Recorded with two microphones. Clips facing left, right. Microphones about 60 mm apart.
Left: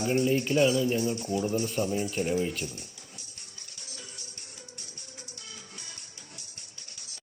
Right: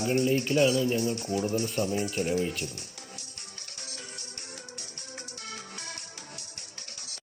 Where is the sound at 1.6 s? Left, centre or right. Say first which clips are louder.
Even; centre.